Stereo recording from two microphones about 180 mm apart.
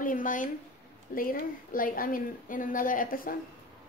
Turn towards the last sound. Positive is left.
turn(degrees=50)  # may be behind; listen again after turning